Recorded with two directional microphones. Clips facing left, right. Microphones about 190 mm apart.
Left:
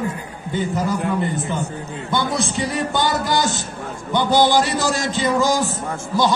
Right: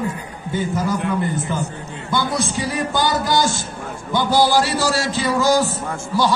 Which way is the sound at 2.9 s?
25° left (ahead or behind).